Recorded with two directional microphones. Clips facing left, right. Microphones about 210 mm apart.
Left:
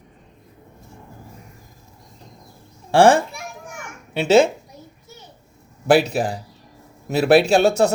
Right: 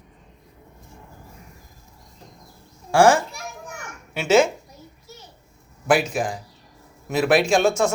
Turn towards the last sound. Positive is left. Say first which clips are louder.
# left 3 dB
turn(degrees=35)  # may be behind; listen again after turning